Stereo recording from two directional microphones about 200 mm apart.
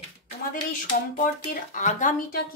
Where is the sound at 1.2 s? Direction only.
40° left (ahead or behind).